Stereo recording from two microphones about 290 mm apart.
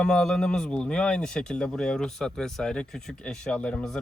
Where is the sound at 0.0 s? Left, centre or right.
Centre.